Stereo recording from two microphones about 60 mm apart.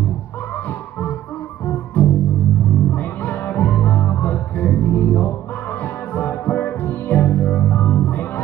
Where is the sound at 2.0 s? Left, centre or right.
Left.